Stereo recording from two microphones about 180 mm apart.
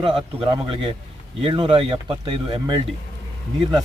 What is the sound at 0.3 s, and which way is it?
Speech, 25° right (ahead or behind).